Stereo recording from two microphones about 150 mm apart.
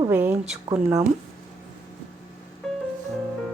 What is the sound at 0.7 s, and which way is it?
Speech, 25° right (ahead or behind).